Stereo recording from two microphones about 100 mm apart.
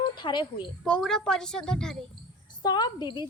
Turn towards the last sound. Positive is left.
turn(degrees=45)  # may be behind; listen again after turning